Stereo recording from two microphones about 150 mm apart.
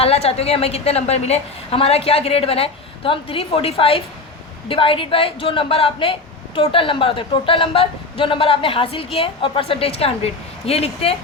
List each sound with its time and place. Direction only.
0.0 s a woman's voice: 40° left (ahead or behind)